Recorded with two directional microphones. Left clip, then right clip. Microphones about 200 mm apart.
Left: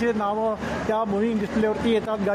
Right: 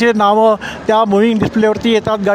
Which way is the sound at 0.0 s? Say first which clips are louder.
Right 13 dB; 40° right (ahead or behind).